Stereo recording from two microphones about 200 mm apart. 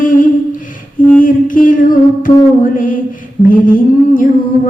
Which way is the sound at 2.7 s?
40° left (ahead or behind).